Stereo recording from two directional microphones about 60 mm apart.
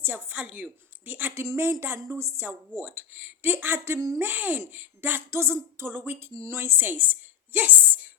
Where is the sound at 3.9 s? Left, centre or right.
Right.